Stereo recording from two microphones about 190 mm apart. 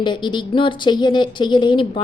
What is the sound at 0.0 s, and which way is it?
A woman's voice, 25° left (ahead or behind).